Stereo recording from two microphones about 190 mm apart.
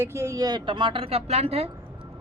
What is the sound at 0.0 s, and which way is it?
A woman's voice, 15° right (ahead or behind).